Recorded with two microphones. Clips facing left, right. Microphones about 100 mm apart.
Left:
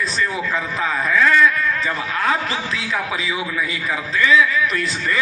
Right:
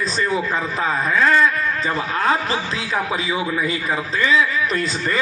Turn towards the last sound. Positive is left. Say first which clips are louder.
# even
turn(degrees=-30)  # may be behind; listen again after turning